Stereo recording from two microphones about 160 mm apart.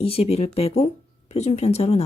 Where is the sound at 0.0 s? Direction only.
40° left (ahead or behind).